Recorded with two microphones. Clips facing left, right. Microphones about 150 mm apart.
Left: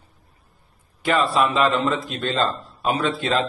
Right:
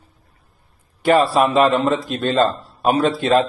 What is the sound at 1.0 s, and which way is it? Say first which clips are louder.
A man's voice: right 5 dB; 40° right (ahead or behind).